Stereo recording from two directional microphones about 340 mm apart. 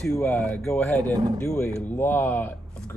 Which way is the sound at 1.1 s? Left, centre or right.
Centre.